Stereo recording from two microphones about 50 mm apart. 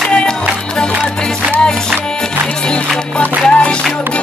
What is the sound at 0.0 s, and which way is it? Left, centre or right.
Music, centre.